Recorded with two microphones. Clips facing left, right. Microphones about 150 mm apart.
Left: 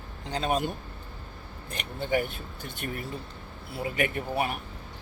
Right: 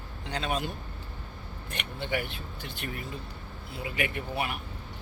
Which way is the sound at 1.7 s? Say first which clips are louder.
Left 4 dB; 40° left (ahead or behind).